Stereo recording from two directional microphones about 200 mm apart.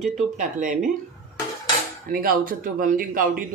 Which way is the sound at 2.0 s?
45° right (ahead or behind).